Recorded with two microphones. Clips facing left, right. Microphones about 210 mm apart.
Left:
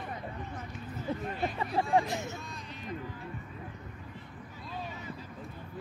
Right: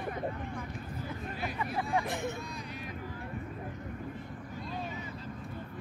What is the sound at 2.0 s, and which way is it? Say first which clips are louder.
Speech: right 2 dB; 55° right (ahead or behind).